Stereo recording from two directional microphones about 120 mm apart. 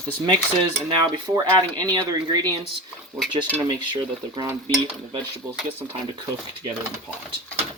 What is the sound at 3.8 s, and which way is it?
Speech, 40° right (ahead or behind).